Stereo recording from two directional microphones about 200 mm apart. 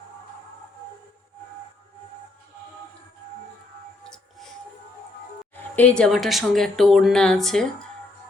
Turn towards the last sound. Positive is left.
turn(degrees=0)  # may be behind; listen again after turning